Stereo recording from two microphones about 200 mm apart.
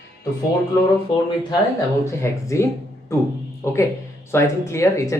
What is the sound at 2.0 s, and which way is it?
Speech, 15° left (ahead or behind).